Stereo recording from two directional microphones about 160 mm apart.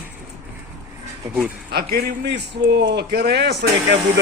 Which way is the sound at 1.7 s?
75° right (ahead or behind).